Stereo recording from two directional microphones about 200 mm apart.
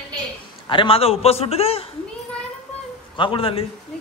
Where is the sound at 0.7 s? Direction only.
25° left (ahead or behind).